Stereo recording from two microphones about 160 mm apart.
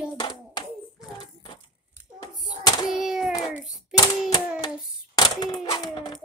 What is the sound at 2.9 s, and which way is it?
Speech, 5° right (ahead or behind).